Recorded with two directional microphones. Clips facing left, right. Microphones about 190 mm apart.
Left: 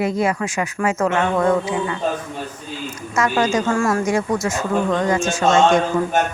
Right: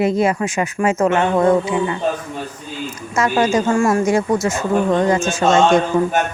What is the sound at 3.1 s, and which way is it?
A woman's voice, 25° right (ahead or behind).